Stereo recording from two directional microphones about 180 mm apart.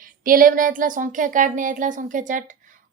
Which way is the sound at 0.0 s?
50° right (ahead or behind).